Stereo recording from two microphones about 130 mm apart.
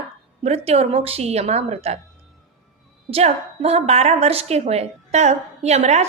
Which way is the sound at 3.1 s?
55° right (ahead or behind).